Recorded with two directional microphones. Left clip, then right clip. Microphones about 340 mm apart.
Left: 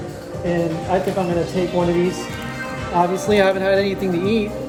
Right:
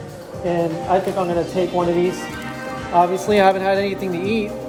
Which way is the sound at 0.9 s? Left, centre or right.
Centre.